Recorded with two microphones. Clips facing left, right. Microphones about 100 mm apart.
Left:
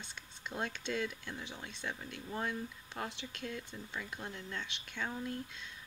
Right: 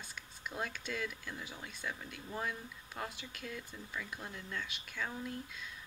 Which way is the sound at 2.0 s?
5° right (ahead or behind).